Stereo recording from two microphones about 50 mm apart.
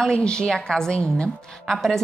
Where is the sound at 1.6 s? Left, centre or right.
Centre.